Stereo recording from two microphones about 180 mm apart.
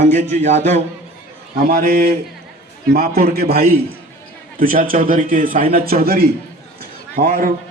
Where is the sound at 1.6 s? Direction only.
60° right (ahead or behind).